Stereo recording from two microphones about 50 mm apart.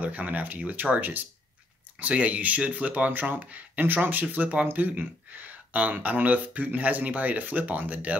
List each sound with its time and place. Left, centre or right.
0.0 s speech: right